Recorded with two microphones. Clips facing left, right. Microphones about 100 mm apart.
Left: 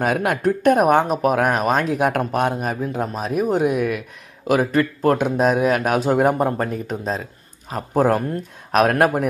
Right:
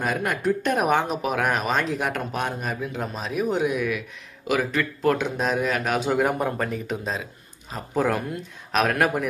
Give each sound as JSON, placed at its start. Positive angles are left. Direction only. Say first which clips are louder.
{"t": 0.0, "sound": "speech", "louder": "left 5 dB", "side_deg": 60}
{"t": 1.7, "sound": "speech", "louder": "left 5 dB", "side_deg": 5}
{"t": 2.0, "sound": "speech", "louder": "left 7 dB", "side_deg": 55}